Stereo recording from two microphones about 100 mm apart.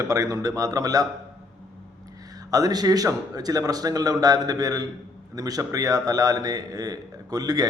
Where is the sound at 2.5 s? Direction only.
40° right (ahead or behind).